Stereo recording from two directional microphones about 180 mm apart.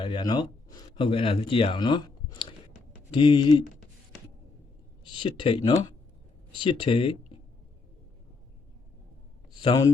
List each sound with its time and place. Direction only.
0.0 s speech: 25° left (ahead or behind)
5.2 s speech: 30° left (ahead or behind)
9.6 s speech: 25° left (ahead or behind)